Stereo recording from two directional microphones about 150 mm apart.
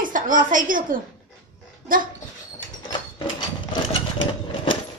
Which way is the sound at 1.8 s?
65° right (ahead or behind).